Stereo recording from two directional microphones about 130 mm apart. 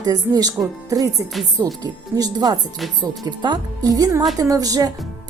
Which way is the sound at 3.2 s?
35° right (ahead or behind).